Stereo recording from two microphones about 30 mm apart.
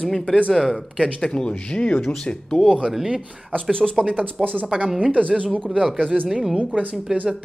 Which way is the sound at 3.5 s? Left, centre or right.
Left.